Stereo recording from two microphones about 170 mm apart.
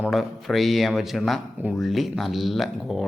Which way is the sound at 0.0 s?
Centre (ahead or behind).